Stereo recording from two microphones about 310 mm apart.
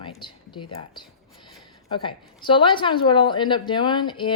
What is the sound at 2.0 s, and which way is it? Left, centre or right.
A woman's voice, centre.